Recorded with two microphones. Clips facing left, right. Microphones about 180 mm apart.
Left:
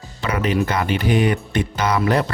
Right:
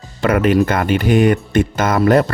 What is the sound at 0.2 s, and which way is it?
Speech, 55° right (ahead or behind).